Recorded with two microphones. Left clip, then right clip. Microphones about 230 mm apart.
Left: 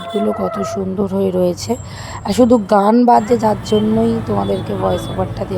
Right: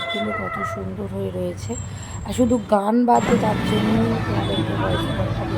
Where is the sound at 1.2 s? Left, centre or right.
Left.